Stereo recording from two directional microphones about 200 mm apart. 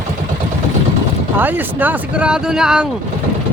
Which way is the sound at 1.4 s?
10° right (ahead or behind).